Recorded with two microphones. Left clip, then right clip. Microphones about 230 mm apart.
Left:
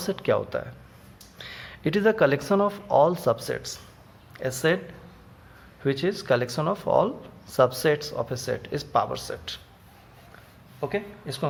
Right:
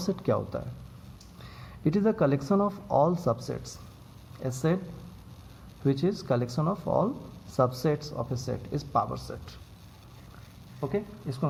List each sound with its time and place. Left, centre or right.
0.0 s speech: left
5.8 s speech: left
10.8 s a woman's voice: left